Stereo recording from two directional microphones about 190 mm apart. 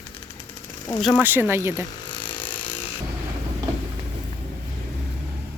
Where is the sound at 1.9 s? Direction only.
25° left (ahead or behind).